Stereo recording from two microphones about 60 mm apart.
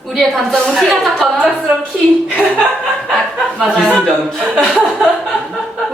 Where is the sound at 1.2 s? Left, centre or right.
Centre.